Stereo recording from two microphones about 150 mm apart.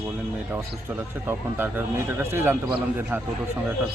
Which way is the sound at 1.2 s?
15° right (ahead or behind).